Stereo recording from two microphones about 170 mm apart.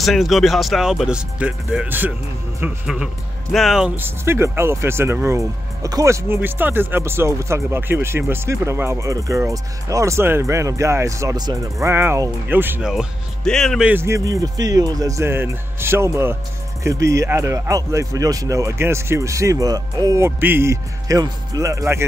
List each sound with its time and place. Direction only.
0.0 s speech: centre (ahead or behind); by 22.0 s 15° right (ahead or behind)